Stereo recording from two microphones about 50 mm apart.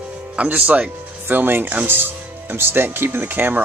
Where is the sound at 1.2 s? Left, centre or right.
Right.